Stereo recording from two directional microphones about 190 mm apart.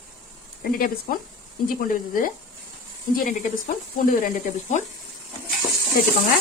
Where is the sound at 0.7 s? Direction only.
50° left (ahead or behind).